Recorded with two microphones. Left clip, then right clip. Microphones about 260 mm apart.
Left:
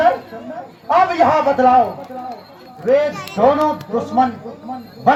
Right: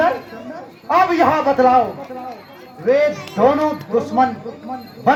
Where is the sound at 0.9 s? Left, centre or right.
Left.